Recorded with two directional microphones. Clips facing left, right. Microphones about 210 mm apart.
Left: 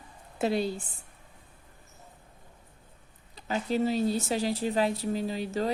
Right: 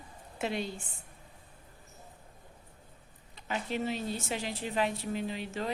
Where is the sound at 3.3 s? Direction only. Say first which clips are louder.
Left 6 dB; 35° left (ahead or behind).